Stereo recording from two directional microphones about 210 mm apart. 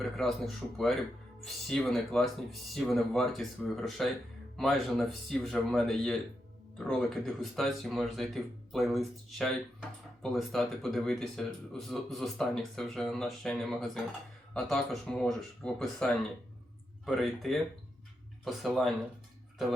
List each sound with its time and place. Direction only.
0.0 s speech: centre (ahead or behind)